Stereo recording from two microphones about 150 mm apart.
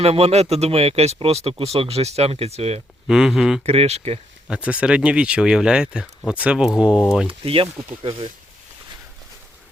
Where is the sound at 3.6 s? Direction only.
40° right (ahead or behind).